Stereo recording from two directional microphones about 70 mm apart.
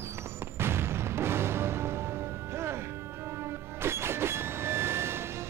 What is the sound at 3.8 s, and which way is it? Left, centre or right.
Music, right.